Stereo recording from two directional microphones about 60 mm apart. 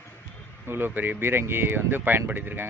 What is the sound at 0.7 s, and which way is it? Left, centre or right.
Speech, right.